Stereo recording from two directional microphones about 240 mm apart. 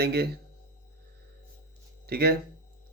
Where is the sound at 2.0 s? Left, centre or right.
Right.